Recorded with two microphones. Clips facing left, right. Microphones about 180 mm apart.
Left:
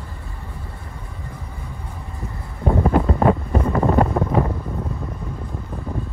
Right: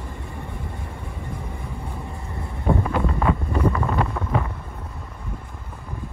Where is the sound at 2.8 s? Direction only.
35° left (ahead or behind).